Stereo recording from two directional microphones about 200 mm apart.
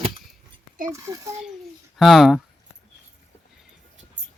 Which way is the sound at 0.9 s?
15° right (ahead or behind).